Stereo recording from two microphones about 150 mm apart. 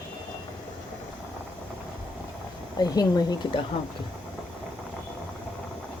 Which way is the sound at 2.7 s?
25° left (ahead or behind).